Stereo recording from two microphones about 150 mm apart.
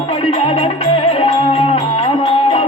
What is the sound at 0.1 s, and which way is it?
Music, 35° left (ahead or behind).